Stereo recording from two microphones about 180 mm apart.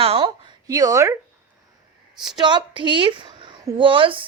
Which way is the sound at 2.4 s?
25° right (ahead or behind).